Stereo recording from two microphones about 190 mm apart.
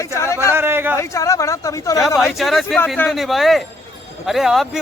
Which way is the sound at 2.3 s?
Centre (ahead or behind).